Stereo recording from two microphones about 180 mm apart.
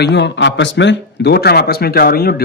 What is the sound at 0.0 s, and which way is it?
Speech, 75° left (ahead or behind).